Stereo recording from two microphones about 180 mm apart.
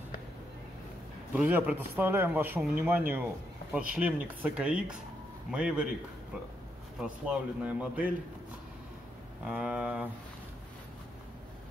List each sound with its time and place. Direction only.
1.3 s speech: 10° right (ahead or behind)
7.0 s speech: 5° right (ahead or behind)
9.4 s speech: 5° right (ahead or behind)